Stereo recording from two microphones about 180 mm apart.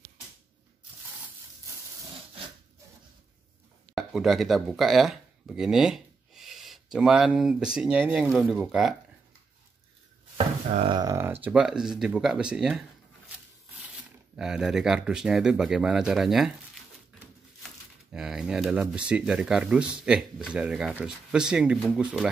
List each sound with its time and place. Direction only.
3.9 s speech: centre (ahead or behind)
10.3 s a sound: 35° right (ahead or behind)
11.0 s speech: 15° right (ahead or behind)
14.3 s speech: 5° right (ahead or behind)
17.6 s speech: 5° right (ahead or behind)